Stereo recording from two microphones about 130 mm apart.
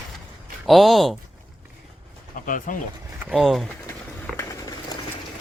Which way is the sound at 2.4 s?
90° left.